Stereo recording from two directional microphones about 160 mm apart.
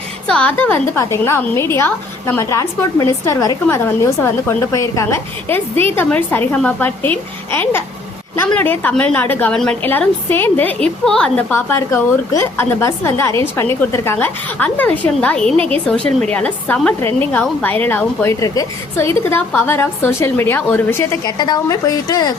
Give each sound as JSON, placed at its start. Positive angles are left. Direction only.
{"t": 0.3, "sound": "a woman's voice", "side_deg": 5}
{"t": 21.2, "sound": "a woman's voice", "side_deg": 25}